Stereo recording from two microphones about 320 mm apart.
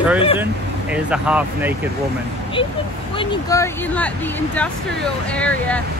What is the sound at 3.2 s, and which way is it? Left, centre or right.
Speech, centre.